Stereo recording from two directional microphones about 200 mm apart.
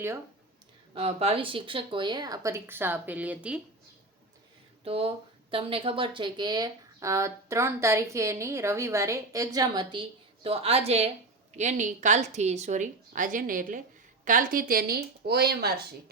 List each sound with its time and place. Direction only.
0.9 s speech: 30° right (ahead or behind); by 3.6 s 5° right (ahead or behind)
4.9 s speech: 30° right (ahead or behind); by 15.7 s 55° right (ahead or behind)